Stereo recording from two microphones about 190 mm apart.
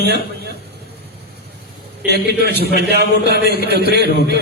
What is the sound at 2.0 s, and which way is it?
A man's voice, 60° right (ahead or behind).